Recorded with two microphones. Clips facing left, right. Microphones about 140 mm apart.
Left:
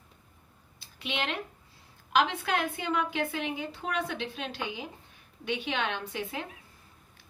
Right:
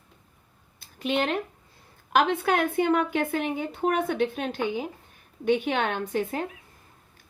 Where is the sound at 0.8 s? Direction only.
45° right (ahead or behind).